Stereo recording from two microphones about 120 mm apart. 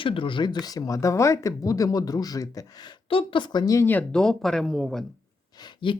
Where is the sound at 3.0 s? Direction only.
45° left (ahead or behind).